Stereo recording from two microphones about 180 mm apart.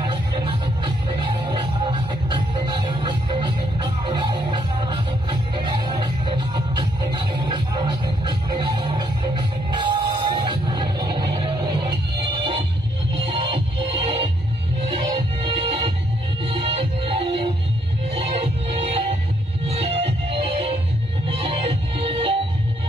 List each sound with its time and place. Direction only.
0.0 s music: 25° right (ahead or behind)